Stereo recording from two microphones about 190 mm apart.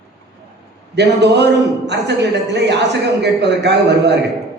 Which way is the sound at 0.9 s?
65° right (ahead or behind).